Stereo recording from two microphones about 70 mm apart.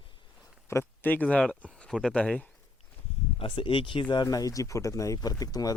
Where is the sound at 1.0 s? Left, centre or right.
Left.